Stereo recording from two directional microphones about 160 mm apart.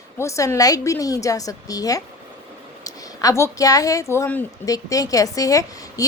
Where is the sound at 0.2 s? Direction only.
20° left (ahead or behind).